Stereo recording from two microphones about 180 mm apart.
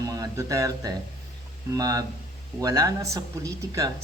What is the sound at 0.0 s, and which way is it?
Speech, 20° right (ahead or behind).